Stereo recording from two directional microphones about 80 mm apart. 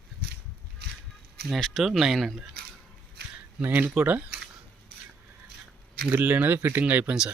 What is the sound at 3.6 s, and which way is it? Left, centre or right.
Speech, right.